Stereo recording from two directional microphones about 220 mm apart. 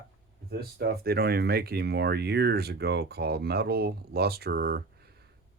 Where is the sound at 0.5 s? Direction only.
45° right (ahead or behind).